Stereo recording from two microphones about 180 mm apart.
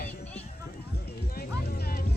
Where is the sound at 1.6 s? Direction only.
60° left (ahead or behind).